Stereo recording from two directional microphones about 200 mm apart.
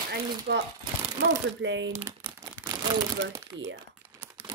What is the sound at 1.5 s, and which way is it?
Speech, 65° right (ahead or behind).